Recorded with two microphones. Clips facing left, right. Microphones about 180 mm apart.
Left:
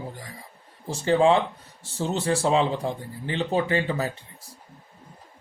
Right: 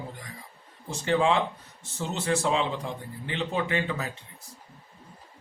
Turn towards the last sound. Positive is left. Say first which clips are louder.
# left 4 dB
turn(degrees=35)  # may be behind; listen again after turning